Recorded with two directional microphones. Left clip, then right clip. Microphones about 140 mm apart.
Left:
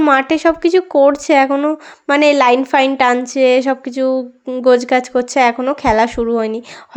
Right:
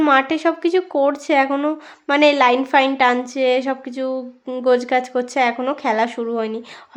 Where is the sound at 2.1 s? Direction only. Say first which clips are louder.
Left 3 dB; 35° left (ahead or behind).